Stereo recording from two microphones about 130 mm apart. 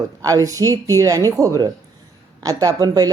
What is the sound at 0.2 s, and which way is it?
Speech, 25° right (ahead or behind).